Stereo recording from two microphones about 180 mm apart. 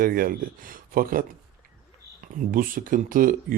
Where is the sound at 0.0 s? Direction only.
50° right (ahead or behind).